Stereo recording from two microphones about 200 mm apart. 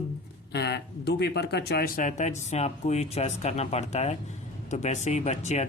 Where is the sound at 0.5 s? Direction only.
55° left (ahead or behind).